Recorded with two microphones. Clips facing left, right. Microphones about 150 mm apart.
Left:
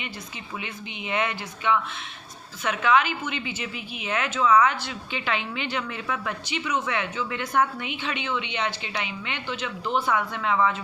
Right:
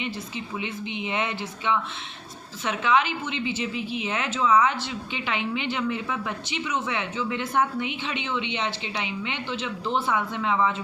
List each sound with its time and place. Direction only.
0.6 s a woman's voice: 25° right (ahead or behind)